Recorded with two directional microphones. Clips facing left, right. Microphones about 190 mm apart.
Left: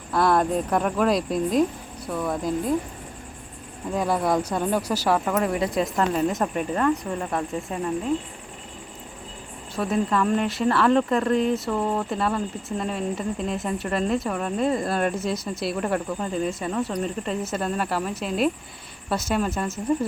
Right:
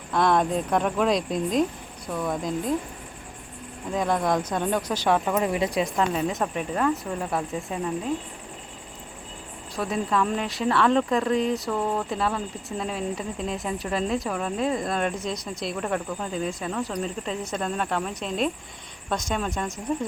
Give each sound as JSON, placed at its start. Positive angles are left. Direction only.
{"t": 0.1, "sound": "speech", "side_deg": 5}
{"t": 3.9, "sound": "speech", "side_deg": 10}
{"t": 5.5, "sound": "speech", "side_deg": -20}
{"t": 5.7, "sound": "speech", "side_deg": 0}
{"t": 9.7, "sound": "speech", "side_deg": 0}